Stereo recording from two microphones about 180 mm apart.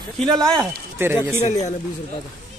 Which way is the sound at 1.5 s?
40° left (ahead or behind).